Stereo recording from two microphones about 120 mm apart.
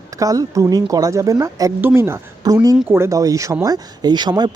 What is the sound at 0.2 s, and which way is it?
Speech, 30° right (ahead or behind).